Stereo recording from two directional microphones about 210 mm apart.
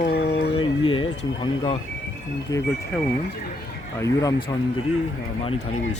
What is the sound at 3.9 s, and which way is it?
Speech, 15° left (ahead or behind).